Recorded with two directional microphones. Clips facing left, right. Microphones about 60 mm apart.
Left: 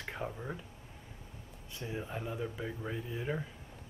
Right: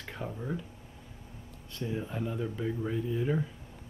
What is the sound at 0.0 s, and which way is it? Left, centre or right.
Speech, centre.